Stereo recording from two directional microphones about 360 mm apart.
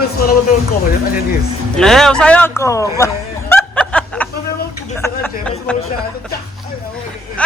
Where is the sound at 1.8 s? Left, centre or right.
Centre.